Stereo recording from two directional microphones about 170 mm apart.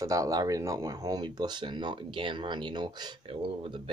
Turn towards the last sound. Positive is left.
turn(degrees=-30)  # may be behind; listen again after turning